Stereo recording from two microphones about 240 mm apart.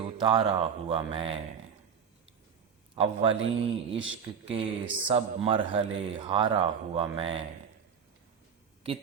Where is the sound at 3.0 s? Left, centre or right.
Right.